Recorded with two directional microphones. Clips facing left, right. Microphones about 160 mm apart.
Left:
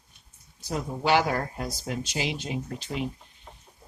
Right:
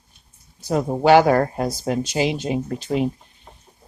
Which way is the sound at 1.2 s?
70° right (ahead or behind).